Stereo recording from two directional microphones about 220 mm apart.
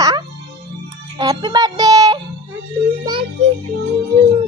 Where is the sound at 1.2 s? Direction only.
20° right (ahead or behind).